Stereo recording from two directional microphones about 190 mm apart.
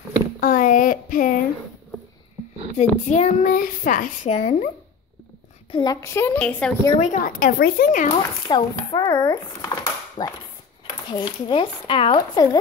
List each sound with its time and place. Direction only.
0.4 s a sound: 45° left (ahead or behind)
2.8 s a child's voice: 35° left (ahead or behind)
5.7 s a woman's voice: 25° left (ahead or behind)
5.9 s a woman's voice: 15° left (ahead or behind)
7.0 s speech: 45° left (ahead or behind)
8.5 s speech: 25° left (ahead or behind)